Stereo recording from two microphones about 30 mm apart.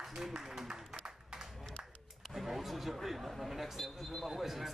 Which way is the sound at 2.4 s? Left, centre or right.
Centre.